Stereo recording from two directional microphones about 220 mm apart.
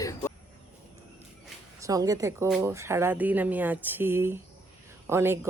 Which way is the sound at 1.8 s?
15° right (ahead or behind).